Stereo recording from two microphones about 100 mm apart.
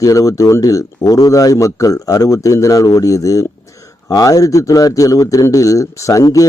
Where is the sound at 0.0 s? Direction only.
35° left (ahead or behind).